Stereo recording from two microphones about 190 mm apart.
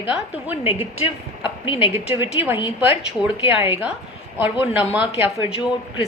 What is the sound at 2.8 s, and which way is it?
Speech, 10° right (ahead or behind).